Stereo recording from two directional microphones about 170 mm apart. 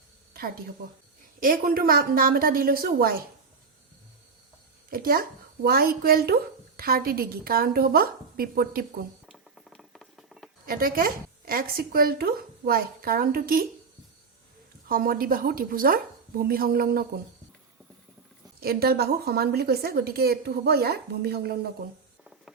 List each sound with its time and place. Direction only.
1.4 s a woman's voice: 55° right (ahead or behind)
4.9 s a woman's voice: 60° right (ahead or behind)
9.2 s mouse: centre (ahead or behind)
10.7 s a woman's voice: 60° right (ahead or behind)
14.8 s a woman's voice: 55° right (ahead or behind)
18.6 s a woman's voice: 65° right (ahead or behind)
22.2 s patter: 5° right (ahead or behind)